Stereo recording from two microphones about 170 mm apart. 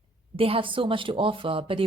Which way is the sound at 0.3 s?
35° right (ahead or behind).